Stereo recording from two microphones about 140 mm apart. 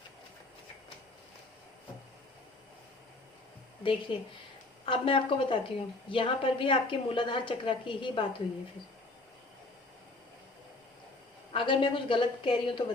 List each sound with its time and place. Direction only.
3.8 s a woman's voice: 40° left (ahead or behind)
11.5 s a woman's voice: 35° left (ahead or behind)